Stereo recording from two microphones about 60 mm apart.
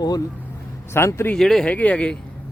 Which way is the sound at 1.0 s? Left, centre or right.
Left.